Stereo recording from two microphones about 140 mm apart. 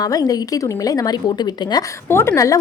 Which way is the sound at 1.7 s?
20° left (ahead or behind).